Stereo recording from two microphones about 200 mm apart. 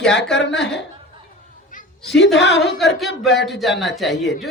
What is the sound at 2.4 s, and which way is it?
Speech, 60° left (ahead or behind).